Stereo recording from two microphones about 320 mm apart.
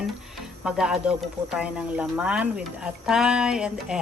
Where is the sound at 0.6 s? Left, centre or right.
Centre.